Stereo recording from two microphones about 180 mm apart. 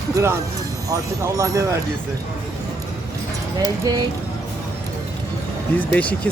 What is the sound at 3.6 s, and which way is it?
Speech, 20° right (ahead or behind).